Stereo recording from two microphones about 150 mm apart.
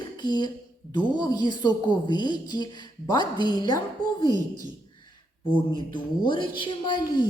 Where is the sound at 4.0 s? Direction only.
65° right (ahead or behind).